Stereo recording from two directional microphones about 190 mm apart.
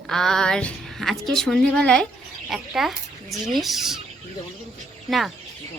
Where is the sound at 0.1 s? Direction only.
5° left (ahead or behind).